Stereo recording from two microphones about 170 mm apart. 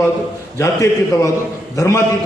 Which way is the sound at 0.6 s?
20° left (ahead or behind).